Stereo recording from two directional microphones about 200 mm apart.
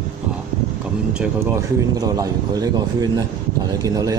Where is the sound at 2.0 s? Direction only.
20° right (ahead or behind).